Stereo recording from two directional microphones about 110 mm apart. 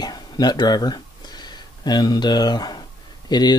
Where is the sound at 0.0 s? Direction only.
40° left (ahead or behind).